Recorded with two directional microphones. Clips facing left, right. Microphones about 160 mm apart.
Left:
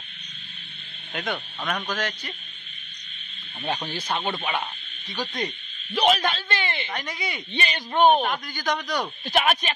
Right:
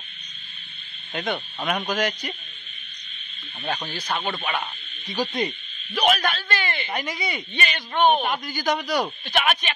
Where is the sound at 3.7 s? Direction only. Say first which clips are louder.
Even; 10° left (ahead or behind).